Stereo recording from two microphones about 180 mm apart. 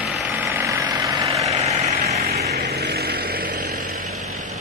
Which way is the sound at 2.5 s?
65° right (ahead or behind).